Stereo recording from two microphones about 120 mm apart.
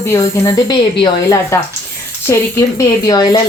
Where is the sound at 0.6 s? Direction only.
40° left (ahead or behind).